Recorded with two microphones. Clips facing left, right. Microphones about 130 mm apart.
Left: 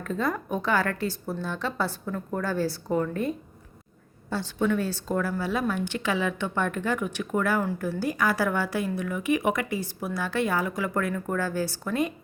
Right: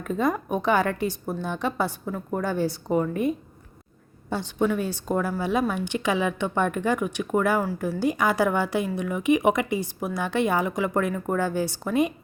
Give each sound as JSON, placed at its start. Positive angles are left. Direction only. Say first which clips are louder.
{"t": 0.0, "sound": "a woman's voice", "louder": "right 3 dB", "side_deg": -15}